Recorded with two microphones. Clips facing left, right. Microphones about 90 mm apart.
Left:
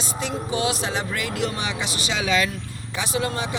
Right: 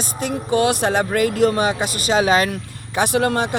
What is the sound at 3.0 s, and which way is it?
Speech, 60° right (ahead or behind).